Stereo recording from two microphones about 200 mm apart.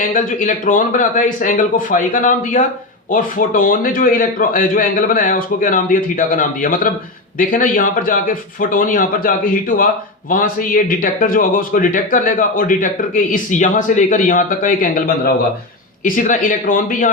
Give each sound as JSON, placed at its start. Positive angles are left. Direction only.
{"t": 0.1, "sound": "speech", "side_deg": 40}